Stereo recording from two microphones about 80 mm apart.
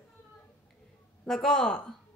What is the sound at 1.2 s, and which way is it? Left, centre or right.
Speech, centre.